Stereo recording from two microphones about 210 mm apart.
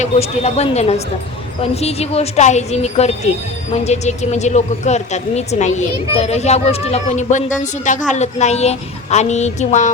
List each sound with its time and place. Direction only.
0.0 s a woman's voice: 30° left (ahead or behind)